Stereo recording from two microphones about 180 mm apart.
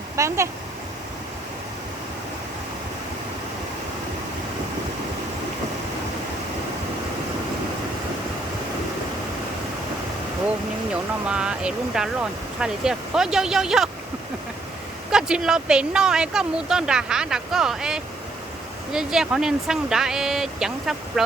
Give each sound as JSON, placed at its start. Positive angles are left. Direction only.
{"t": 0.2, "sound": "speech", "side_deg": -15}
{"t": 11.3, "sound": "speech", "side_deg": -5}
{"t": 15.1, "sound": "speech", "side_deg": -5}